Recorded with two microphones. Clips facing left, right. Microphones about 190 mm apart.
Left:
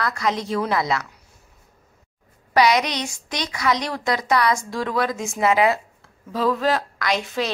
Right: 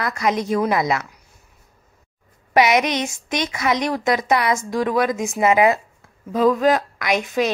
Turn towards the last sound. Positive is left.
turn(degrees=-15)  # may be behind; listen again after turning